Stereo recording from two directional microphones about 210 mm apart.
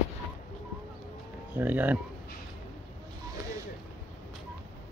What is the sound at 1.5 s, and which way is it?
Speech, 10° right (ahead or behind).